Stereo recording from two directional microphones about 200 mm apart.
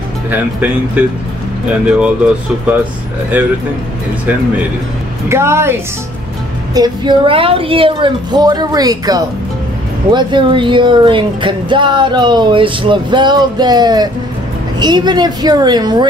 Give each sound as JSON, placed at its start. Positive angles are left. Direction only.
{"t": 0.3, "sound": "speech", "side_deg": -10}
{"t": 3.3, "sound": "speech", "side_deg": -10}
{"t": 5.3, "sound": "speech", "side_deg": -15}